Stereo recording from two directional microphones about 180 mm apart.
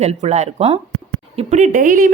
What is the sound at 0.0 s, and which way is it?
A woman's voice, 35° right (ahead or behind).